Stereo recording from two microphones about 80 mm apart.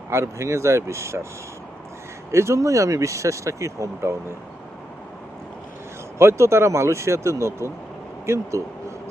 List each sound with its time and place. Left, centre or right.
0.1 s speech: right
2.3 s speech: right
6.1 s speech: right